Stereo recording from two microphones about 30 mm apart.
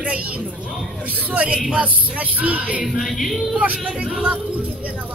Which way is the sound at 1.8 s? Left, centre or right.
Right.